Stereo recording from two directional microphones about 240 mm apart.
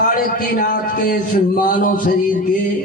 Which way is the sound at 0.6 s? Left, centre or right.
Left.